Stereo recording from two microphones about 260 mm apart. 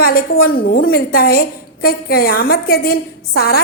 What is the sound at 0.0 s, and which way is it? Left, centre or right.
A woman's voice, left.